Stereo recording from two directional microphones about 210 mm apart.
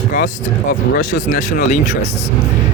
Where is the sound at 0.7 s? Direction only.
45° left (ahead or behind).